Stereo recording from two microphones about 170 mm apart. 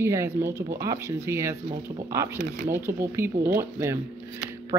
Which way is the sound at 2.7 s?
15° right (ahead or behind).